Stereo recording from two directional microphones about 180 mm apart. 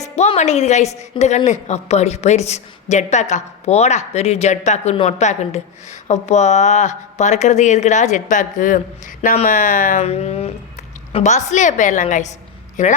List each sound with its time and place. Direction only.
0.0 s a woman's voice: 40° left (ahead or behind)